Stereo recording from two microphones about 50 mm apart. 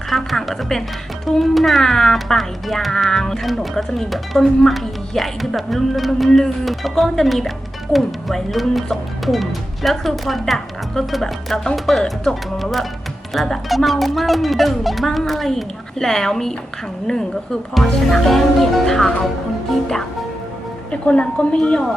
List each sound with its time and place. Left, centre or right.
0.1 s a woman's voice: centre
20.9 s a woman's voice: left
21.6 s a woman's voice: centre